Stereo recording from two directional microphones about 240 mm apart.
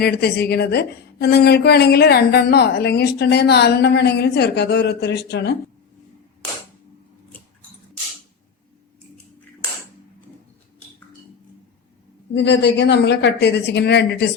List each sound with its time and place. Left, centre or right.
0.0 s a woman's voice: left
12.3 s a woman's voice: left